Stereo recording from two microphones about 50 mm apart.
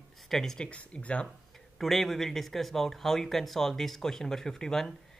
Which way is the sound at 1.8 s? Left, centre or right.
Centre.